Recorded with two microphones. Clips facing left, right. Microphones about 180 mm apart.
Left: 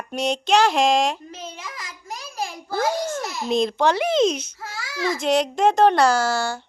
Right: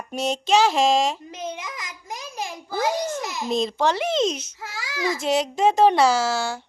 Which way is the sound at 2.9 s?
Centre (ahead or behind).